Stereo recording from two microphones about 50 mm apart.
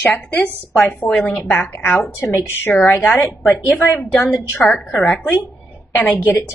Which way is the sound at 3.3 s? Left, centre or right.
Centre.